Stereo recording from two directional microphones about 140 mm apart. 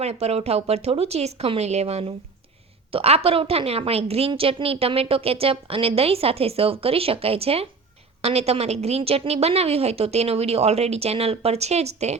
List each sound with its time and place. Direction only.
0.0 s a woman's voice: 50° right (ahead or behind)